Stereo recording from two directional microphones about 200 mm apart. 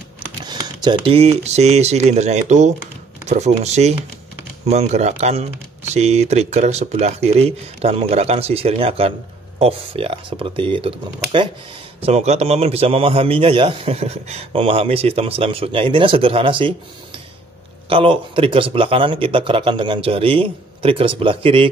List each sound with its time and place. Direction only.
0.4 s a man's voice: 20° right (ahead or behind)
17.8 s a man's voice: 25° right (ahead or behind)